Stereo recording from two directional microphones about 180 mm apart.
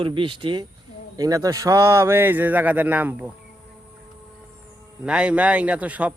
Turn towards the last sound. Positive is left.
turn(degrees=-10)  # may be behind; listen again after turning